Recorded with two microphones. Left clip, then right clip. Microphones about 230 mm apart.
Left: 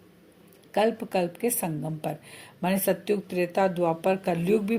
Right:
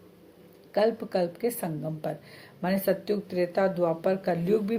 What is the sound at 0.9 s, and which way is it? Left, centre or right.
Speech, left.